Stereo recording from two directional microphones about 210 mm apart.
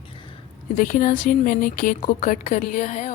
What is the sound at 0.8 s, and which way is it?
A woman's voice, 40° left (ahead or behind).